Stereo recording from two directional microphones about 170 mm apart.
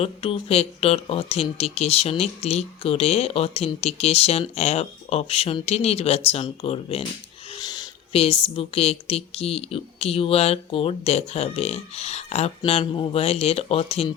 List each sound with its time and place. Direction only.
0.0 s speech: 35° left (ahead or behind)
7.6 s a sound: 25° left (ahead or behind)
8.2 s speech: 35° left (ahead or behind)